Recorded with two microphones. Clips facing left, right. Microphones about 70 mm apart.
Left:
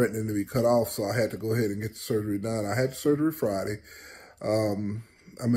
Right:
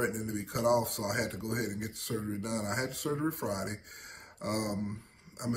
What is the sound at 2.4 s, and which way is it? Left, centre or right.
Speech, left.